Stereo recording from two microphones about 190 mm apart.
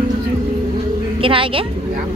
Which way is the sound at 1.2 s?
25° right (ahead or behind).